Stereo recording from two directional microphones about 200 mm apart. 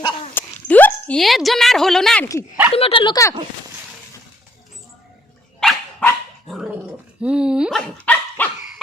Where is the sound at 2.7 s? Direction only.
25° left (ahead or behind).